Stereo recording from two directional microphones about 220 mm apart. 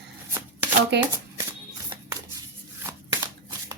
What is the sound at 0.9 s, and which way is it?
Speech, 50° right (ahead or behind).